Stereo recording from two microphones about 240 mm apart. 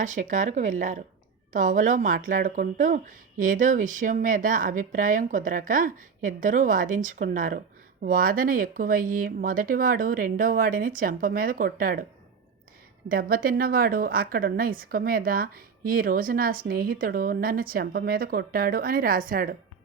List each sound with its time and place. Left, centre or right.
0.0 s a woman's voice: right
13.1 s a woman's voice: right